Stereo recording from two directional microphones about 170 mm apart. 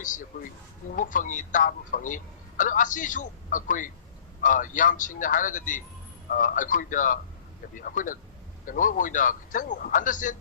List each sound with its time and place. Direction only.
0.0 s speech: 50° left (ahead or behind)